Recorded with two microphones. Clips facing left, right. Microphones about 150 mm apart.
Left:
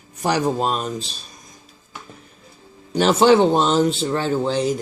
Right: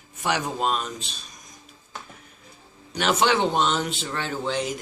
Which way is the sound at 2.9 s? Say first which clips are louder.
Left 8 dB; 30° left (ahead or behind).